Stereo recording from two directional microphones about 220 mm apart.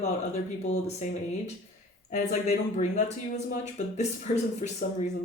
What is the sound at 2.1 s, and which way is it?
Speech, 35° left (ahead or behind).